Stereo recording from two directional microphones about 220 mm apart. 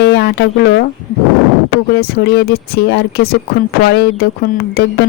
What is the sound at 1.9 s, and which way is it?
Speech, 45° left (ahead or behind).